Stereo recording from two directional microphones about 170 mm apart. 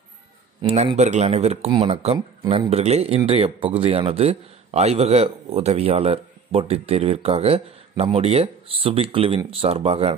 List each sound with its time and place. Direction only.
0.7 s a man's voice: 40° right (ahead or behind)